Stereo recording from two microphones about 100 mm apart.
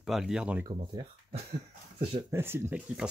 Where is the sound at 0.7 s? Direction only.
45° right (ahead or behind).